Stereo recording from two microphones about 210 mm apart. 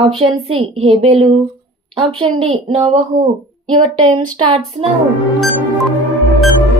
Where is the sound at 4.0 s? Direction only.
25° right (ahead or behind).